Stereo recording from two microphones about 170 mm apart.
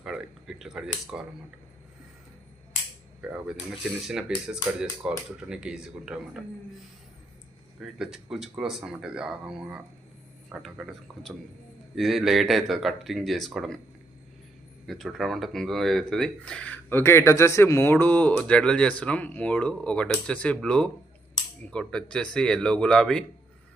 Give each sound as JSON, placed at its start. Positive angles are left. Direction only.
{"t": 0.0, "sound": "a sound", "side_deg": -5}
{"t": 3.2, "sound": "speech", "side_deg": -5}
{"t": 7.8, "sound": "speech", "side_deg": -5}
{"t": 14.8, "sound": "speech", "side_deg": 0}